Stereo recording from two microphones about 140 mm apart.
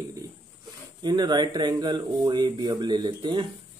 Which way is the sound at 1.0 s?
30° right (ahead or behind).